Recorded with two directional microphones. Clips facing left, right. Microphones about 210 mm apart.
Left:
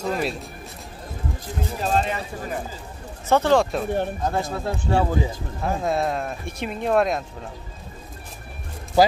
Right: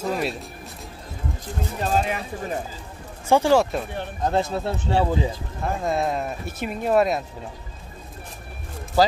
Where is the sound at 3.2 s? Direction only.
10° right (ahead or behind).